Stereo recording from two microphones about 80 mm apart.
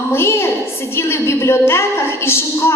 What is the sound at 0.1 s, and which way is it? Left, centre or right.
A woman's voice, left.